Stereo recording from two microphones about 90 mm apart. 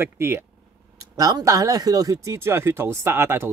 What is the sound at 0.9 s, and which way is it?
Speech, 40° right (ahead or behind).